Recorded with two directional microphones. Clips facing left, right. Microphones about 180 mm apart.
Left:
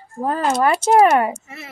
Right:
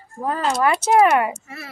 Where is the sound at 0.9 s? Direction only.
35° left (ahead or behind).